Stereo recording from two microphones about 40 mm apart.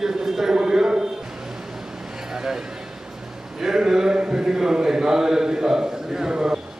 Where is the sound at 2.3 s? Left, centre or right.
Centre.